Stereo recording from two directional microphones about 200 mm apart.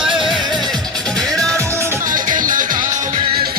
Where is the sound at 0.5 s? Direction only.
Centre (ahead or behind).